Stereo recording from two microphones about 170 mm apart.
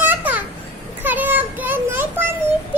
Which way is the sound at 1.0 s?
10° right (ahead or behind).